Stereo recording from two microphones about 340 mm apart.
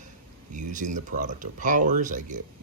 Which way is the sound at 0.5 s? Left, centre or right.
Right.